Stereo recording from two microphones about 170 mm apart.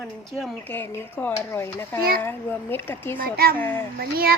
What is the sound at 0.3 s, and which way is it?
Speech, centre (ahead or behind).